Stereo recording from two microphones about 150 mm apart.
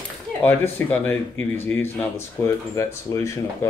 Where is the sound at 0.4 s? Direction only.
10° left (ahead or behind).